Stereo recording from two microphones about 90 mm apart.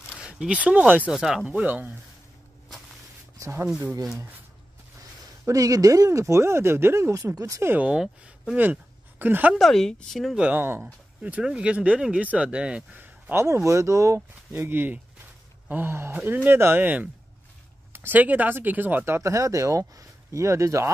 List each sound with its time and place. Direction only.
0.1 s speech: 10° right (ahead or behind)
1.1 s speech: 5° right (ahead or behind)
1.5 s speech: 20° right (ahead or behind)
3.3 s a sound: 35° right (ahead or behind)
5.4 s speech: 40° right (ahead or behind)
7.7 s speech: 10° right (ahead or behind)
9.2 s speech: 20° right (ahead or behind)
9.6 s speech: 5° left (ahead or behind)
10.5 s speech: 25° right (ahead or behind)
14.6 s speech: 20° right (ahead or behind)